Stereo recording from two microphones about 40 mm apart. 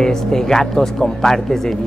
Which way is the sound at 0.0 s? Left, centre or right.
Centre.